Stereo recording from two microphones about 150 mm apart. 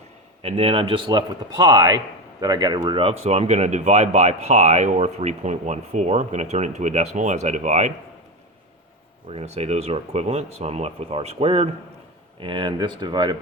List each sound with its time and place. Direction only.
0.4 s a man's voice: 40° right (ahead or behind)
9.3 s a man's voice: 45° right (ahead or behind)